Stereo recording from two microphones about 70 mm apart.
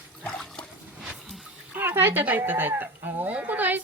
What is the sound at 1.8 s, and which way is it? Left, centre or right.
Speech, right.